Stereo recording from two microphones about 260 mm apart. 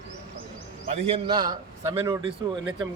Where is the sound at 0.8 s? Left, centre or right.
Right.